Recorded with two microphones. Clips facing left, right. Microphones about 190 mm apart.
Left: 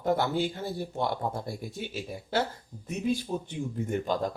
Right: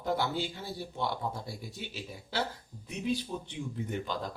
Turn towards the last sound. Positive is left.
turn(degrees=45)  # may be behind; listen again after turning